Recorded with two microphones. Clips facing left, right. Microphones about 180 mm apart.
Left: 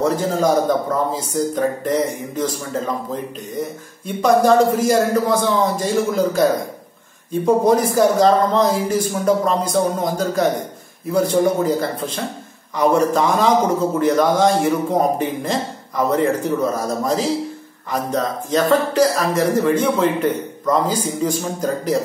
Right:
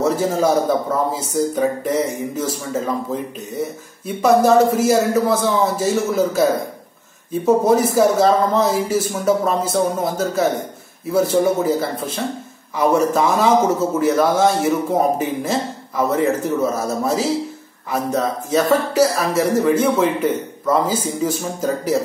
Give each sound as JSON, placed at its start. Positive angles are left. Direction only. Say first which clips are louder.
{"t": 0.0, "sound": "a man's voice", "louder": "even", "side_deg": -5}
{"t": 7.4, "sound": "a man's voice", "louder": "even", "side_deg": -5}